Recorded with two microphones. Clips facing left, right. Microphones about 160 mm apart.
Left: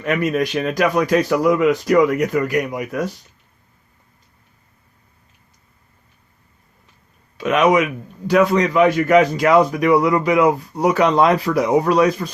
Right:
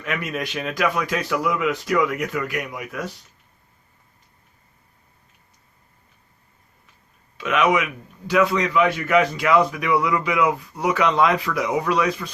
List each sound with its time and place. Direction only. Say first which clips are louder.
0.0 s a man's voice: left 8 dB; 40° left (ahead or behind)
7.3 s a man's voice: left 5 dB; 40° left (ahead or behind)